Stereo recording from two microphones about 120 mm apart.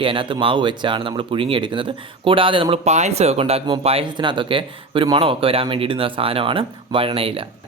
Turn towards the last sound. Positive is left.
turn(degrees=-50)  # may be behind; listen again after turning